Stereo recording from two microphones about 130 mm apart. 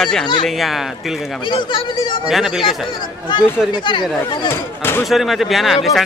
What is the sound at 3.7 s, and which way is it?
Speech, 35° left (ahead or behind).